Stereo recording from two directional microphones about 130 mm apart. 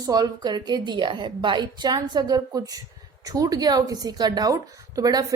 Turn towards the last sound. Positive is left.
turn(degrees=-30)  # may be behind; listen again after turning